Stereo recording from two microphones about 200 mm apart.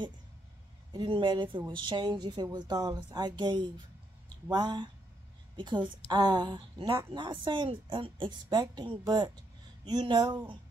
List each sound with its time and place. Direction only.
0.9 s a woman's voice: 25° right (ahead or behind)